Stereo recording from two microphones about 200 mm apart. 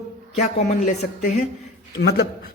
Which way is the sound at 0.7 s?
40° left (ahead or behind).